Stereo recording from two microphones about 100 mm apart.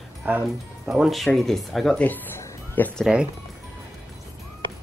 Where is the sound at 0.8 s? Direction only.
5° right (ahead or behind).